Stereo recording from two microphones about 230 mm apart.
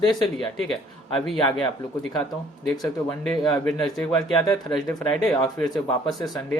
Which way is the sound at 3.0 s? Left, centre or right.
Centre.